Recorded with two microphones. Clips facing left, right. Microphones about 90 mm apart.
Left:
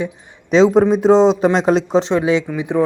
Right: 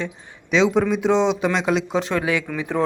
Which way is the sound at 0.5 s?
40° left (ahead or behind).